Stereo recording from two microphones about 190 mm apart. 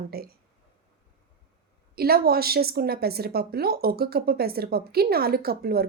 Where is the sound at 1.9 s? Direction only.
55° right (ahead or behind).